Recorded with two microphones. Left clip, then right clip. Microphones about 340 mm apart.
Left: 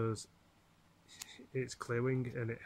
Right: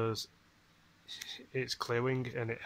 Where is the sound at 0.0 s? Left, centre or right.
Centre.